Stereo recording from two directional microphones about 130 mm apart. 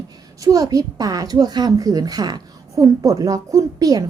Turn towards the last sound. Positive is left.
turn(degrees=-30)  # may be behind; listen again after turning